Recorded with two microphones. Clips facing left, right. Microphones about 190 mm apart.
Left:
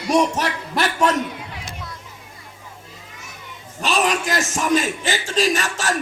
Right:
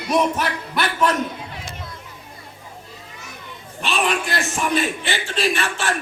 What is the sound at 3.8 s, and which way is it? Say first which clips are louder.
A man's voice: left 2 dB; 40° left (ahead or behind).